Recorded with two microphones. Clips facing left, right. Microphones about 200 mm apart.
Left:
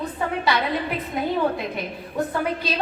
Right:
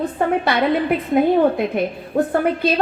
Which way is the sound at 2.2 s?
55° right (ahead or behind).